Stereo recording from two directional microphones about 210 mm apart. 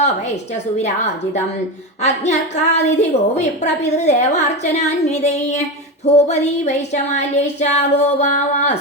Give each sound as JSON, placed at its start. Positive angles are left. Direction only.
{"t": 0.8, "sound": "a woman's voice", "side_deg": 35}